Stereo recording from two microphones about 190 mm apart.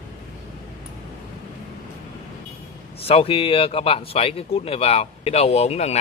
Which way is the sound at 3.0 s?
30° left (ahead or behind).